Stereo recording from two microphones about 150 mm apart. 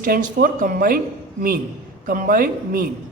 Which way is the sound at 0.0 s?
75° right (ahead or behind).